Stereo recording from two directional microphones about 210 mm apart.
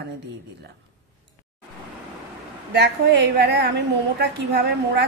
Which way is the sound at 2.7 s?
55° right (ahead or behind).